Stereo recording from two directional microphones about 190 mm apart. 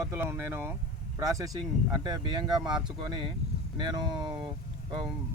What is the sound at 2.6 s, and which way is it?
Speech, 25° right (ahead or behind).